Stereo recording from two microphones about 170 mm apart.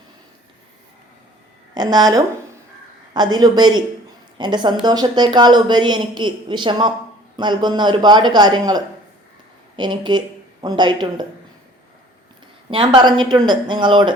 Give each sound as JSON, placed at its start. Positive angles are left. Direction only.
{"t": 1.7, "sound": "a woman's voice", "side_deg": -25}
{"t": 12.7, "sound": "a woman's voice", "side_deg": -30}